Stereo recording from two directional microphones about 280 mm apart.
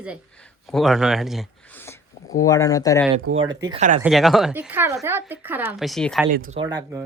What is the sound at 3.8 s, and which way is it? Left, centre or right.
Speech, right.